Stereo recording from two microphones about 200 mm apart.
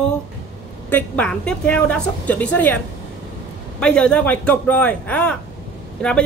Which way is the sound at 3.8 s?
5° left (ahead or behind).